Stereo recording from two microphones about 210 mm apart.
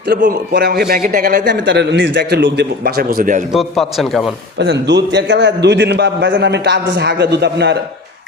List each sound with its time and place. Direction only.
0.0 s a man's voice: 45° right (ahead or behind)
1.5 s a man's voice: 55° right (ahead or behind)
3.5 s a man's voice: centre (ahead or behind)
4.5 s a man's voice: 55° right (ahead or behind)